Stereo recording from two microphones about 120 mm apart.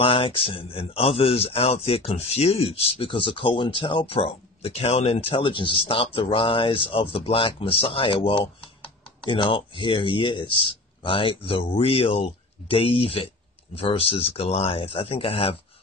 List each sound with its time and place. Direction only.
0.0 s speech: 50° left (ahead or behind)